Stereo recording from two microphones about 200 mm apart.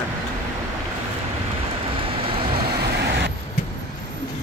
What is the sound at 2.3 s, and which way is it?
Vehicle, 25° right (ahead or behind).